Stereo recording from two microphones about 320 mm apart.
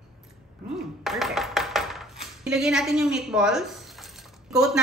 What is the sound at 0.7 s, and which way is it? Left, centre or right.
Speech, centre.